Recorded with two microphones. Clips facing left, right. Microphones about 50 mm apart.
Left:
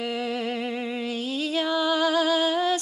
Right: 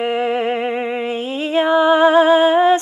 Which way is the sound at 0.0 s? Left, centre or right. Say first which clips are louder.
Right 10 dB; right.